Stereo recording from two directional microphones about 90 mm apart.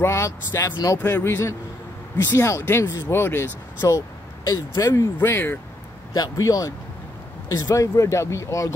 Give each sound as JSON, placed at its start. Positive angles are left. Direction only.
{"t": 0.0, "sound": "speech", "side_deg": 30}
{"t": 4.5, "sound": "speech", "side_deg": 40}
{"t": 6.1, "sound": "speech", "side_deg": 45}